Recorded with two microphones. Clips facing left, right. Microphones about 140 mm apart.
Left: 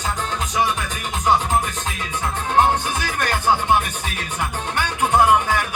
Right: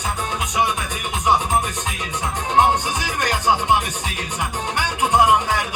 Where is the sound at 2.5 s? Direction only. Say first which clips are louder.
Right 1 dB; 15° right (ahead or behind).